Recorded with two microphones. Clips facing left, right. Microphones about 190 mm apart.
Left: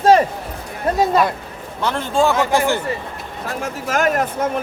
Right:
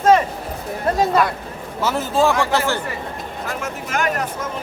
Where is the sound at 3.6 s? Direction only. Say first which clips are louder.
Left 5 dB; 40° left (ahead or behind).